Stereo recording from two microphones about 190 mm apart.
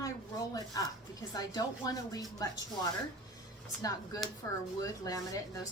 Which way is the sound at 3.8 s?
20° left (ahead or behind).